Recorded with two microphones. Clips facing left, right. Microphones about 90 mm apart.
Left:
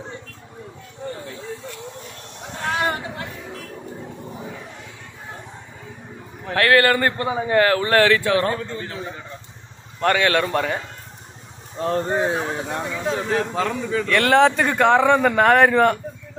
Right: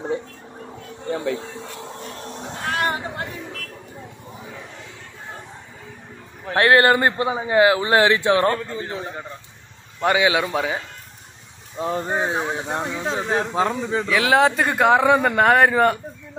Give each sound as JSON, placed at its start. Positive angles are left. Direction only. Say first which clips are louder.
{"t": 1.1, "sound": "speech", "louder": "right 10 dB", "side_deg": -90}
{"t": 1.4, "sound": "a sound", "louder": "left 1 dB", "side_deg": -20}
{"t": 2.6, "sound": "chatter", "louder": "left 1 dB", "side_deg": 0}
{"t": 6.5, "sound": "a man's voice", "louder": "right 1 dB", "side_deg": -25}
{"t": 9.9, "sound": "speech", "louder": "even", "side_deg": -10}
{"t": 11.8, "sound": "speech", "louder": "left 2 dB", "side_deg": -5}
{"t": 12.2, "sound": "a man's voice", "louder": "left 1 dB", "side_deg": -25}
{"t": 14.0, "sound": "speech", "louder": "left 2 dB", "side_deg": -5}